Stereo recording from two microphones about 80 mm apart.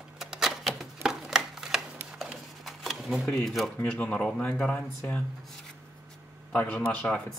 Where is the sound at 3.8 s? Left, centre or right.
Centre.